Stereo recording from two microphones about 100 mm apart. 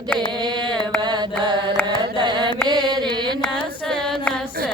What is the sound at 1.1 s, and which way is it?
Mantra, 50° right (ahead or behind).